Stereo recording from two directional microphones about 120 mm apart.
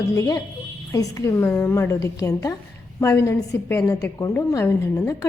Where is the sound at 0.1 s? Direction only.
25° left (ahead or behind).